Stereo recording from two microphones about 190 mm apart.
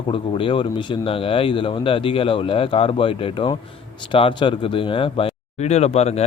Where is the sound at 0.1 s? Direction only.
25° left (ahead or behind).